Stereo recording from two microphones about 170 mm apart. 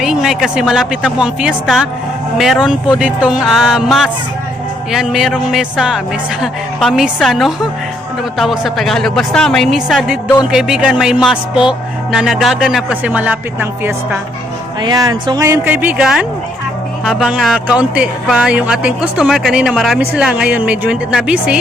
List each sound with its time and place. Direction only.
0.0 s speech: centre (ahead or behind)
14.8 s speech: 25° right (ahead or behind); by 21.6 s 5° right (ahead or behind)